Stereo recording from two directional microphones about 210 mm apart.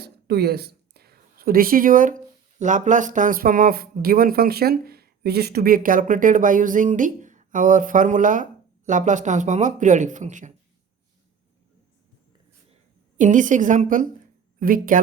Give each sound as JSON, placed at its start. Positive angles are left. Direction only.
{"t": 0.0, "sound": "a woman's voice", "side_deg": -50}
{"t": 13.1, "sound": "speech", "side_deg": -35}